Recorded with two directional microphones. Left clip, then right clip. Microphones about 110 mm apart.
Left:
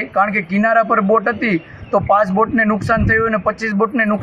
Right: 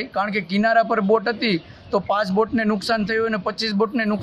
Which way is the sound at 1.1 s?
40° right (ahead or behind).